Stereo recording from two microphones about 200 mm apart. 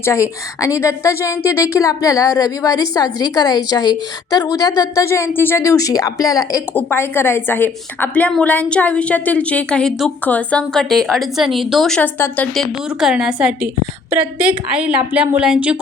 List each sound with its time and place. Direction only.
0.0 s a woman's voice: 15° left (ahead or behind)
13.0 s a woman's voice: 5° right (ahead or behind)